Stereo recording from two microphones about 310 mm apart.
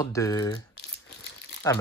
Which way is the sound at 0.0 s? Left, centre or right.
Centre.